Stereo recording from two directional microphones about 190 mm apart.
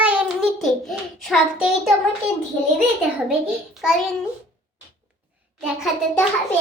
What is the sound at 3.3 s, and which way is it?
Speech, 5° right (ahead or behind).